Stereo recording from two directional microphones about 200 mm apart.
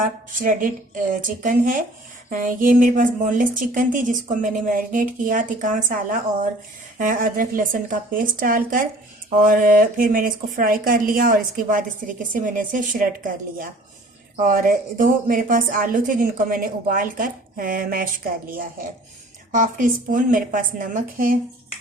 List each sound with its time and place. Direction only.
0.0 s a woman's voice: 45° right (ahead or behind)